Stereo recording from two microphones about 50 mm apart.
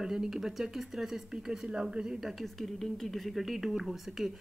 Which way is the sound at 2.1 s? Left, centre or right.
Centre.